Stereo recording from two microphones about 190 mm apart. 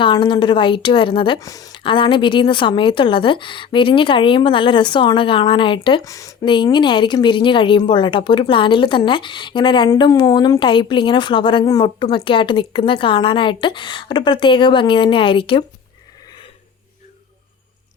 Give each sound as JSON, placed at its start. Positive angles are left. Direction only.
{"t": 0.0, "sound": "a woman's voice", "side_deg": 25}